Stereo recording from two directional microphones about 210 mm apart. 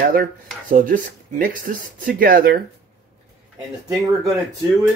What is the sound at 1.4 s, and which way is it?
Speech, 40° right (ahead or behind).